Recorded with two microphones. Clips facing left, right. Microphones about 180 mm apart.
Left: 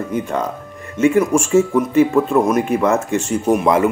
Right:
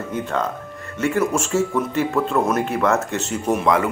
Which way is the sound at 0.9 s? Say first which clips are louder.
Left 6 dB; 15° left (ahead or behind).